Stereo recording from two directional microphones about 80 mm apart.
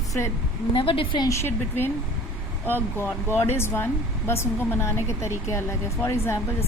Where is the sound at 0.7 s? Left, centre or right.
Left.